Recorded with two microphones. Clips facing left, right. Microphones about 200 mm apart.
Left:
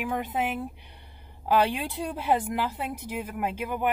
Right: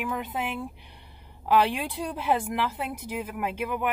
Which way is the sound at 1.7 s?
Centre (ahead or behind).